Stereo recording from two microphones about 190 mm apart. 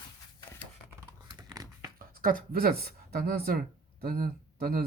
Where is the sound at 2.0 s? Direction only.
50° right (ahead or behind).